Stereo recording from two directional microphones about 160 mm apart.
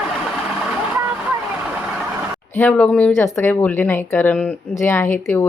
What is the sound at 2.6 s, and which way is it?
Speech, 10° left (ahead or behind).